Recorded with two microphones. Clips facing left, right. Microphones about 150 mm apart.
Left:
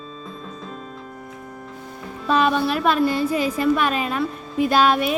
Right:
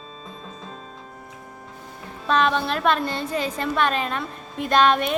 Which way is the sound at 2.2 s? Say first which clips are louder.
Left 2 dB; 5° left (ahead or behind).